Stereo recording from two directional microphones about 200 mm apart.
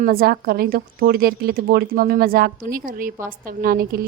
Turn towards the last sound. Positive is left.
turn(degrees=-50)  # may be behind; listen again after turning